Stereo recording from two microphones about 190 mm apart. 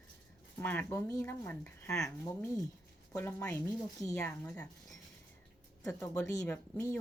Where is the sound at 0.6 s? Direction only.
10° left (ahead or behind).